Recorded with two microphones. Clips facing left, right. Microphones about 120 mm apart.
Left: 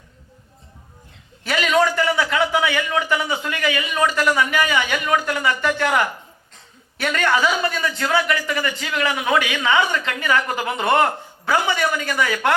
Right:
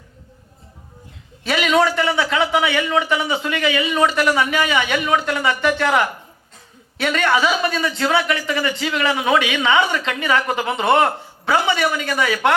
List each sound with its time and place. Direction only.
1.5 s a man's voice: 20° right (ahead or behind)